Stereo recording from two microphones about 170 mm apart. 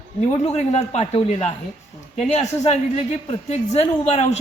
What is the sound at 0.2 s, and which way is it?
Speech, 40° left (ahead or behind).